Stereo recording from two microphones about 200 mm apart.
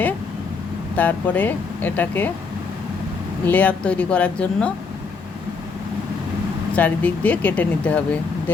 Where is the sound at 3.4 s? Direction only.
10° left (ahead or behind).